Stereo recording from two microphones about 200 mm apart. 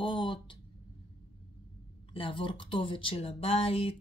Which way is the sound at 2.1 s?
25° left (ahead or behind).